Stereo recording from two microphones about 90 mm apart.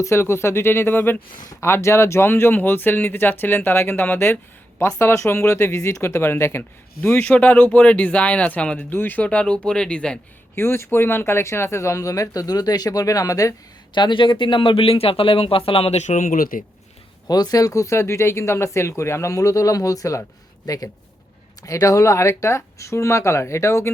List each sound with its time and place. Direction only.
0.0 s speech: 30° left (ahead or behind); by 10.2 s 10° left (ahead or behind)
10.5 s speech: 25° left (ahead or behind)
13.9 s speech: 60° left (ahead or behind); by 15.9 s 90° left
17.2 s speech: 45° left (ahead or behind); by 23.9 s 30° left (ahead or behind)